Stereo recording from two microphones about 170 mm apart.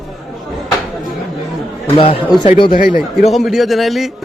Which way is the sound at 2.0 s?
30° left (ahead or behind).